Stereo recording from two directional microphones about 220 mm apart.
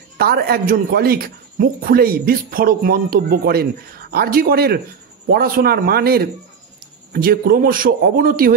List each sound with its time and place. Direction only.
0.2 s a man's voice: 45° right (ahead or behind)